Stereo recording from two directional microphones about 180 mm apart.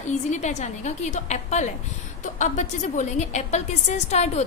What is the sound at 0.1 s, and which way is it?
A woman's voice, 40° left (ahead or behind).